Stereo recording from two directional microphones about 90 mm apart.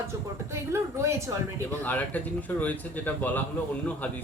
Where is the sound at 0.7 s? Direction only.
30° right (ahead or behind).